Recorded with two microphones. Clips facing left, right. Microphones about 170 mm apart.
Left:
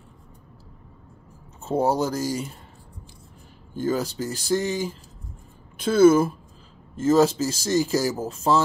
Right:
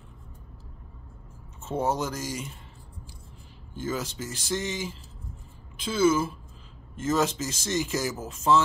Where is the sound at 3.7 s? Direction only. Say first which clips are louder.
Left 7 dB; 40° left (ahead or behind).